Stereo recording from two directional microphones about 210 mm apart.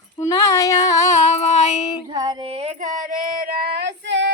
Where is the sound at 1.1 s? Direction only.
30° left (ahead or behind).